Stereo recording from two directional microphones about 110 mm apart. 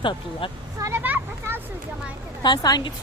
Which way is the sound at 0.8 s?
20° right (ahead or behind).